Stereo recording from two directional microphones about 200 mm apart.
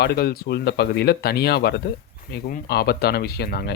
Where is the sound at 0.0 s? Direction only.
55° left (ahead or behind).